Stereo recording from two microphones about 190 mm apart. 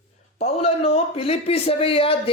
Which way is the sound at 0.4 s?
30° left (ahead or behind).